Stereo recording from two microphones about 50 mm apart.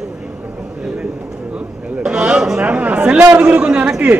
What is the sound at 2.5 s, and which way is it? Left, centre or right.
A man's voice, right.